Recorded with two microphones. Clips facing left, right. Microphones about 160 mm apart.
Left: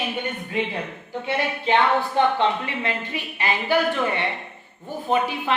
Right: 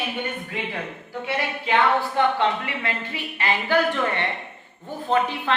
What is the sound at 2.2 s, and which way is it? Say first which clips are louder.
A man's voice: left 1 dB; 20° left (ahead or behind).